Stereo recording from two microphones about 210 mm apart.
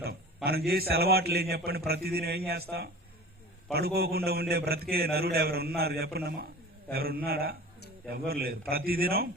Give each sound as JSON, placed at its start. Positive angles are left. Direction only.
{"t": 0.4, "sound": "a man's voice", "side_deg": -50}